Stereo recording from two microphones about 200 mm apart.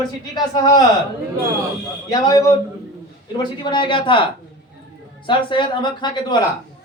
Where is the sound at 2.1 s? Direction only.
20° left (ahead or behind).